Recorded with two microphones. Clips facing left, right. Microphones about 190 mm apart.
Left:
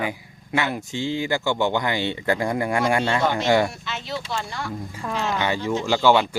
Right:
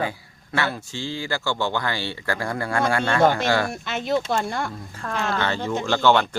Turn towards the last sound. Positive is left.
turn(degrees=10)  # may be behind; listen again after turning